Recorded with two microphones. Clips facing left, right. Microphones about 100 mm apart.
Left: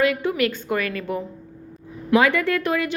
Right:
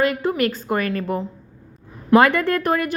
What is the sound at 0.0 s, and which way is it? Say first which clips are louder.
A woman's voice: right 1 dB; 40° right (ahead or behind).